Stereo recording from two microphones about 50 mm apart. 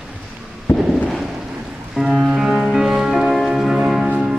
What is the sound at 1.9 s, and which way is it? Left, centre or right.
Music, centre.